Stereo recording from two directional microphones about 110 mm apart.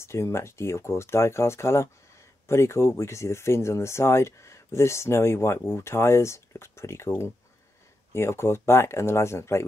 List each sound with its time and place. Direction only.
0.0 s speech: 25° left (ahead or behind)